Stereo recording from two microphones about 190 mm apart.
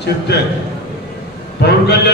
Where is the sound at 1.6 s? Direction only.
60° left (ahead or behind).